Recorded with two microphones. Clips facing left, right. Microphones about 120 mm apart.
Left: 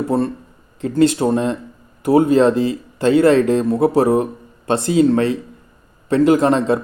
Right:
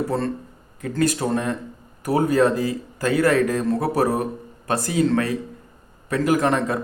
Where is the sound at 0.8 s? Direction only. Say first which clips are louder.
Left 7 dB; 25° left (ahead or behind).